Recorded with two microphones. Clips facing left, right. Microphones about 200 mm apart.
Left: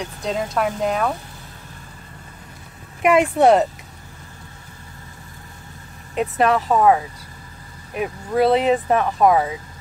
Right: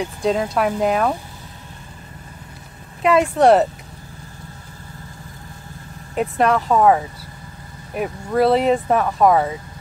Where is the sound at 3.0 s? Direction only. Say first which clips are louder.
Even; 15° left (ahead or behind).